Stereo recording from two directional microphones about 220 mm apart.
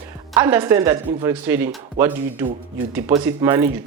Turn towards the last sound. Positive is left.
turn(degrees=-10)  # may be behind; listen again after turning